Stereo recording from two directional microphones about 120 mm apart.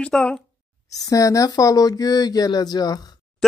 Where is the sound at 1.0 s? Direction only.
30° left (ahead or behind).